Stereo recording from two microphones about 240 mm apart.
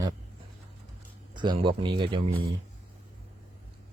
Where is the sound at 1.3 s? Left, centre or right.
Centre.